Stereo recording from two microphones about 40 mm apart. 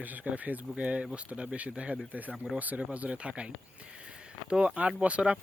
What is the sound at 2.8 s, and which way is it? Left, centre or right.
Speech, right.